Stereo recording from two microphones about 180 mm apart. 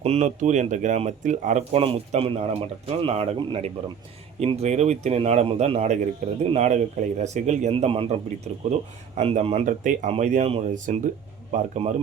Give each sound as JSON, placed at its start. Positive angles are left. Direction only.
{"t": 0.0, "sound": "a man's voice", "side_deg": -35}